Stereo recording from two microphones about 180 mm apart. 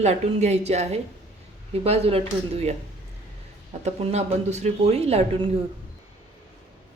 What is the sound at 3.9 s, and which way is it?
Speech, 40° right (ahead or behind).